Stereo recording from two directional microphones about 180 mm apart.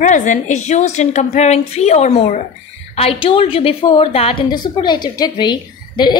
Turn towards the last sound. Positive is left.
turn(degrees=25)  # may be behind; listen again after turning